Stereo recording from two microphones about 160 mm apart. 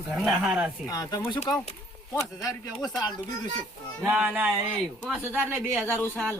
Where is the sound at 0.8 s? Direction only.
25° left (ahead or behind).